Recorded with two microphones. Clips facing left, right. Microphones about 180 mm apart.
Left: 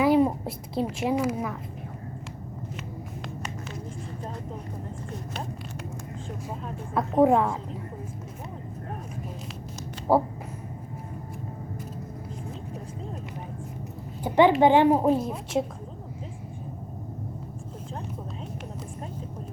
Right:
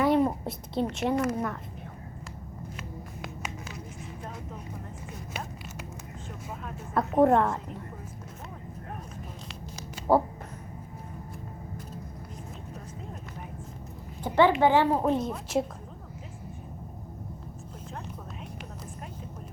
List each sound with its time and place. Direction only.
0.0 s a woman's voice: 5° left (ahead or behind)
2.7 s music: 5° right (ahead or behind)
6.9 s a woman's voice: centre (ahead or behind)
10.1 s a woman's voice: 5° left (ahead or behind)
14.3 s a child's voice: 15° left (ahead or behind)
15.0 s a woman's voice: 5° left (ahead or behind)